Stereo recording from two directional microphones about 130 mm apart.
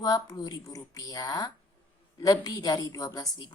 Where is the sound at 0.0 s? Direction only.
30° left (ahead or behind).